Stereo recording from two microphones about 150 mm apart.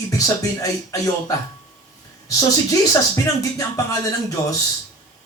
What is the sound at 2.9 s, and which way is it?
Speech, 20° left (ahead or behind).